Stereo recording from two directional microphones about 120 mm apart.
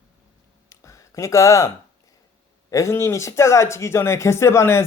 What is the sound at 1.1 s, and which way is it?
Speech, 25° left (ahead or behind).